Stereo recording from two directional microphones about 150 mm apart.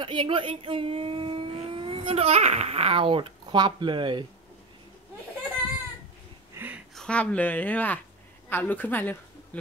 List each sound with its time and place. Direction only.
0.0 s speech: 35° right (ahead or behind)
6.5 s a sound: 10° right (ahead or behind)
7.0 s a woman's voice: 5° left (ahead or behind)